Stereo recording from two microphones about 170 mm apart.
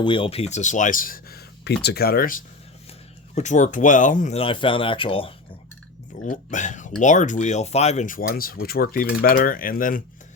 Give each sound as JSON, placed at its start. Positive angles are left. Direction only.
{"t": 0.0, "sound": "speech", "side_deg": 30}
{"t": 3.3, "sound": "speech", "side_deg": 45}
{"t": 4.4, "sound": "speech", "side_deg": 30}
{"t": 6.2, "sound": "speech", "side_deg": 45}